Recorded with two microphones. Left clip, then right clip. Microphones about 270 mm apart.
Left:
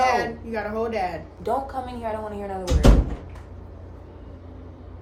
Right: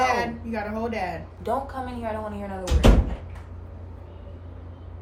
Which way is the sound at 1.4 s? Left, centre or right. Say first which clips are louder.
Left 2 dB; left.